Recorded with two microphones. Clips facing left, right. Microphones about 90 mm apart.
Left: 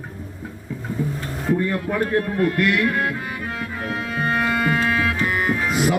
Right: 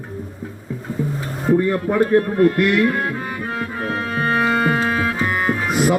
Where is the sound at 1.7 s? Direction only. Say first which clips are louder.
Right 5 dB; 20° right (ahead or behind).